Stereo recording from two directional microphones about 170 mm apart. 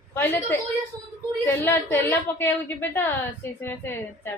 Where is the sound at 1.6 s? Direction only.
10° left (ahead or behind).